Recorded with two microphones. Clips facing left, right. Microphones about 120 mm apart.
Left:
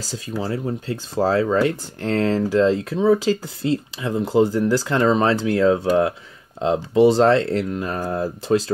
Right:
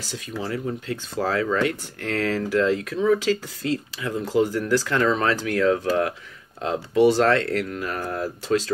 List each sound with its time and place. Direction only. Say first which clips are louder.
0.0 s speech: left 4 dB; 30° left (ahead or behind)